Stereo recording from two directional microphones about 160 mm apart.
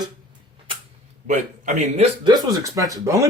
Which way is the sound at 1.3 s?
50° right (ahead or behind).